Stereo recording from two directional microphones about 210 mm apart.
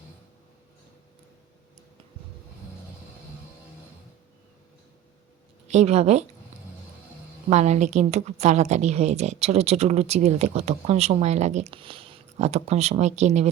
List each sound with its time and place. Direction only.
5.6 s a woman's voice: 30° right (ahead or behind)
7.5 s a woman's voice: 35° right (ahead or behind)